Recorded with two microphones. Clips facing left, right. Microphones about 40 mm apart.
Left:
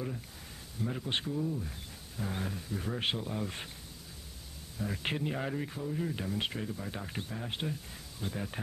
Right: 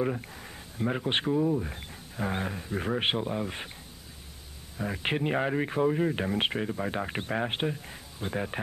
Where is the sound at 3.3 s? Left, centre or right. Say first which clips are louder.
Right 4 dB; right.